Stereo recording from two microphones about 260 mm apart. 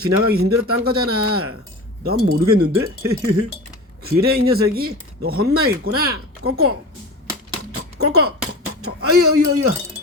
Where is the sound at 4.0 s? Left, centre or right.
Right.